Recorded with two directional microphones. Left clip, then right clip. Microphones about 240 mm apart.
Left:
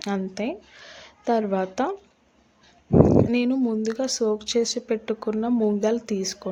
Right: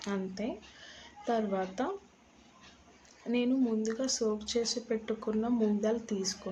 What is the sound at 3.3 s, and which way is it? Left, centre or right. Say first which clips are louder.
Speech: left 7 dB; left.